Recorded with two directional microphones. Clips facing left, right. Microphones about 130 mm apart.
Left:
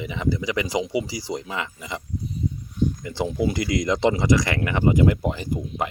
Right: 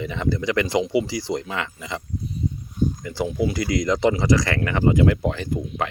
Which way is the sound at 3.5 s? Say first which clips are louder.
Right 1 dB; 20° left (ahead or behind).